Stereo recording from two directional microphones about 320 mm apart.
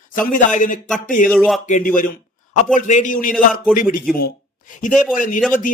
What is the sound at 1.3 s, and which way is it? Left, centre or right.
Speech, centre.